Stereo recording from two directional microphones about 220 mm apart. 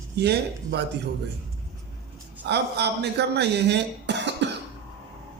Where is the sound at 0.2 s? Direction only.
50° right (ahead or behind).